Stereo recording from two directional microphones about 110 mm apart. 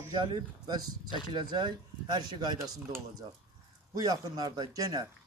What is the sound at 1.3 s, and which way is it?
Speech, 40° right (ahead or behind).